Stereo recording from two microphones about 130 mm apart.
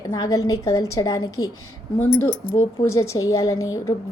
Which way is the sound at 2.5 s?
25° left (ahead or behind).